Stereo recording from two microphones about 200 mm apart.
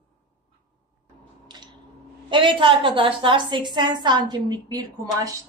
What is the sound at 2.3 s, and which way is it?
Speech, 25° right (ahead or behind).